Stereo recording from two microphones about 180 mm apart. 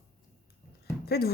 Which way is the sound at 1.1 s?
60° left (ahead or behind).